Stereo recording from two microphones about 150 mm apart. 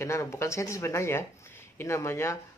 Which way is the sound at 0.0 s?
20° left (ahead or behind).